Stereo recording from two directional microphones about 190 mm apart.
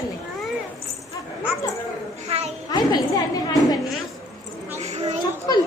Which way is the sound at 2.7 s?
20° left (ahead or behind).